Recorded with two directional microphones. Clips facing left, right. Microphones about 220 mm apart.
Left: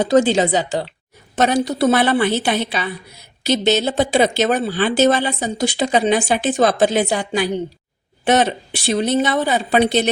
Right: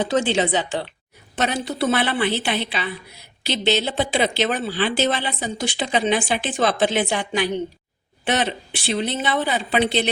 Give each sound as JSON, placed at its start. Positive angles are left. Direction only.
{"t": 0.0, "sound": "speech", "side_deg": 40}